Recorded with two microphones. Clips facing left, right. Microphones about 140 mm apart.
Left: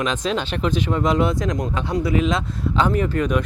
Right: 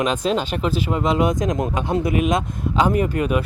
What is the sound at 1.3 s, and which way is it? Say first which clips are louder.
Speech: right 2 dB; 20° right (ahead or behind).